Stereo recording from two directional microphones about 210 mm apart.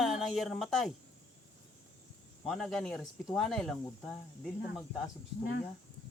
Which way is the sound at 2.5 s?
Centre (ahead or behind).